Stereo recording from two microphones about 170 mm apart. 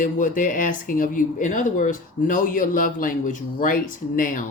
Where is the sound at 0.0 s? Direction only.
50° left (ahead or behind).